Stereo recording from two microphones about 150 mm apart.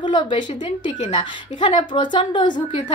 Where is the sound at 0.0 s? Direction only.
30° left (ahead or behind).